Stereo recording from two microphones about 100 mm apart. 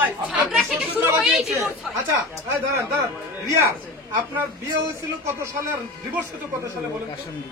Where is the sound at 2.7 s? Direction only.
30° right (ahead or behind).